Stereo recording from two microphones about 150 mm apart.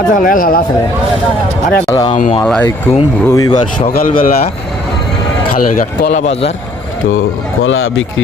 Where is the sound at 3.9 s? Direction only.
65° left (ahead or behind).